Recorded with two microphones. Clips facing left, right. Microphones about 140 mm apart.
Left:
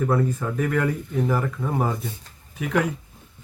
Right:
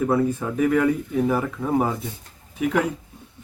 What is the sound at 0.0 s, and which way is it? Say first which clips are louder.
Speech: right 2 dB; 5° right (ahead or behind).